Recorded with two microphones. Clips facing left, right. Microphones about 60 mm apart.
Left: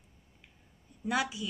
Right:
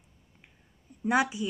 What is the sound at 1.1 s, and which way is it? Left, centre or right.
Speech, right.